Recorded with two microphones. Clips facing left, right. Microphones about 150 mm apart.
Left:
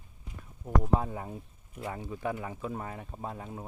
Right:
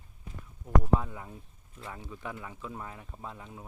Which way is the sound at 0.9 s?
40° left (ahead or behind).